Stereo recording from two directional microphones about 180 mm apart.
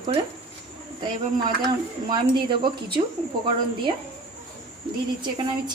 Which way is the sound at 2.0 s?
25° right (ahead or behind).